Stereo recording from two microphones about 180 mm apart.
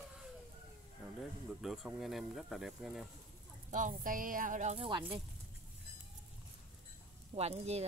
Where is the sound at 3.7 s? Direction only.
45° right (ahead or behind).